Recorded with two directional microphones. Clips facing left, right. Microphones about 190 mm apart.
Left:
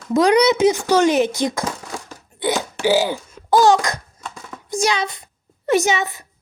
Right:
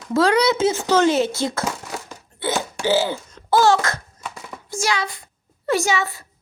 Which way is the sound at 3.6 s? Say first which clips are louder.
Left 2 dB; 15° left (ahead or behind).